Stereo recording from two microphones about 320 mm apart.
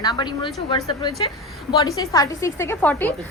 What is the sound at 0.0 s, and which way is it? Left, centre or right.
A woman's voice, centre.